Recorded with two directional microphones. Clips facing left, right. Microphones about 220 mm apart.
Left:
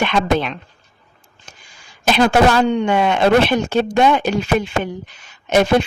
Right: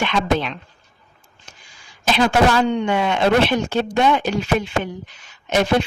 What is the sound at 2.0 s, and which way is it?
Speech, 50° left (ahead or behind).